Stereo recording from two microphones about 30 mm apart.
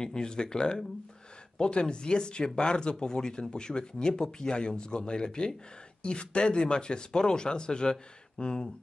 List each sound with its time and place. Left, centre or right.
0.0 s speech: left